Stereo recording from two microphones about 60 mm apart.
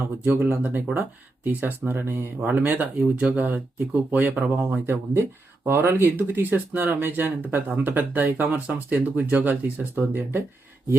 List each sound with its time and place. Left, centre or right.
0.3 s speech: right